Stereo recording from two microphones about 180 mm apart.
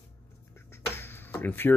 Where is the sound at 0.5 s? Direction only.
10° left (ahead or behind).